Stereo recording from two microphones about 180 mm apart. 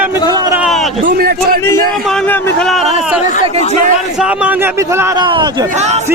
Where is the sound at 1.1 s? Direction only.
55° right (ahead or behind).